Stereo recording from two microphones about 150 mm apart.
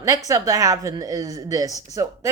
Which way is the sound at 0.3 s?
20° right (ahead or behind).